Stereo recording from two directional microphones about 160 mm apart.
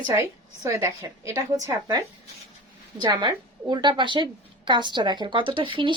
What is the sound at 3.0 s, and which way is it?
A woman's voice, 25° right (ahead or behind).